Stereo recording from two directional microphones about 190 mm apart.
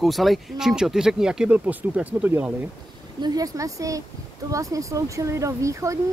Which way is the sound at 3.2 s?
20° right (ahead or behind).